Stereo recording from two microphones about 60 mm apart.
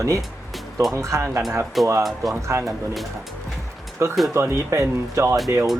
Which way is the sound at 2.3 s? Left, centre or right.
Right.